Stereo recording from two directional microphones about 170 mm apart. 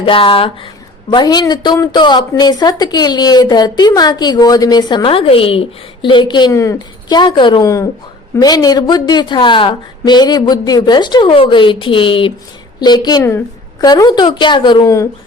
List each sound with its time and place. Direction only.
0.0 s a woman's voice: 30° left (ahead or behind)